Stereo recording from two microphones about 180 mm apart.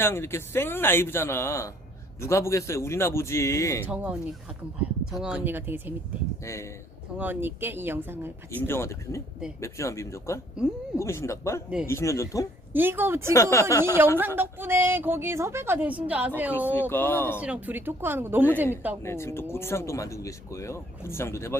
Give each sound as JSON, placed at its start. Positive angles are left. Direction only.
{"t": 0.0, "sound": "speech", "side_deg": 15}
{"t": 3.8, "sound": "a woman's voice", "side_deg": -5}
{"t": 6.4, "sound": "speech", "side_deg": 15}
{"t": 7.2, "sound": "a woman's voice", "side_deg": -10}
{"t": 8.4, "sound": "speech", "side_deg": 15}
{"t": 12.7, "sound": "a woman's voice", "side_deg": -10}
{"t": 13.3, "sound": "speech", "side_deg": 15}
{"t": 14.2, "sound": "a woman's voice", "side_deg": -10}
{"t": 16.6, "sound": "speech", "side_deg": 10}
{"t": 17.4, "sound": "a woman's voice", "side_deg": -10}
{"t": 19.0, "sound": "speech", "side_deg": 15}